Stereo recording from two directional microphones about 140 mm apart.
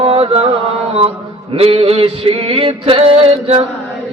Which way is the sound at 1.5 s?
45° right (ahead or behind).